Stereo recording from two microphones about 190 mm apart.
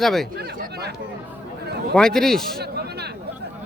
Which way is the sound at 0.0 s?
Centre (ahead or behind).